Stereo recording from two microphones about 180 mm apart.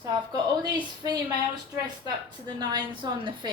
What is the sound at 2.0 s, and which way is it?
A woman's voice, 25° right (ahead or behind).